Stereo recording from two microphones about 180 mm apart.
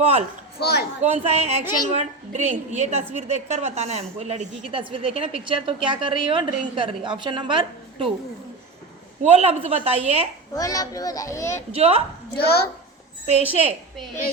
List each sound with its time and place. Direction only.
0.0 s a woman's voice: 35° right (ahead or behind)
0.6 s speech: 60° left (ahead or behind)
1.0 s a woman's voice: 35° right (ahead or behind)
9.2 s a woman's voice: 35° right (ahead or behind)
10.5 s a child's voice: 20° left (ahead or behind)
11.7 s a woman's voice: 30° right (ahead or behind)
13.2 s a woman's voice: 35° right (ahead or behind)